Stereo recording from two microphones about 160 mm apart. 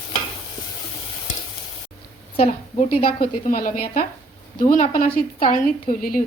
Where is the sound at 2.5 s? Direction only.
50° left (ahead or behind).